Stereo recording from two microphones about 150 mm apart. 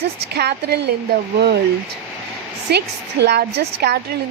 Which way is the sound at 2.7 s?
90° right.